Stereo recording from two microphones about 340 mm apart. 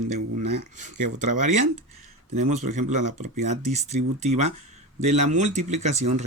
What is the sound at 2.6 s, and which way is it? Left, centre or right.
Speech, right.